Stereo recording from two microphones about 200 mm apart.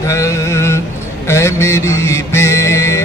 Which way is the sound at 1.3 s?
15° left (ahead or behind).